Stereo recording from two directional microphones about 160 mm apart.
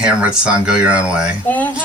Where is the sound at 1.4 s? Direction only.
10° left (ahead or behind).